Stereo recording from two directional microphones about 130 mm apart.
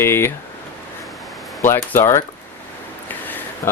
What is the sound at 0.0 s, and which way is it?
Speech, 20° left (ahead or behind).